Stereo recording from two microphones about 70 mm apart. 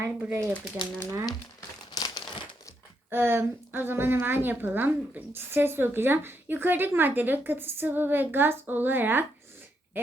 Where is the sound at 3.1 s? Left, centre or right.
Right.